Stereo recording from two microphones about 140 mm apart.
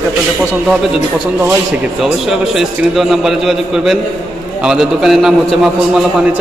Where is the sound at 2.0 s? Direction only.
Centre (ahead or behind).